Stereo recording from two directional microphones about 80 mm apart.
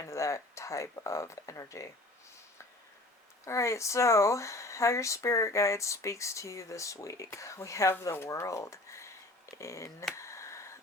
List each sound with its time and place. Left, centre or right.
0.0 s speech: left
3.4 s speech: left
10.2 s a sound: left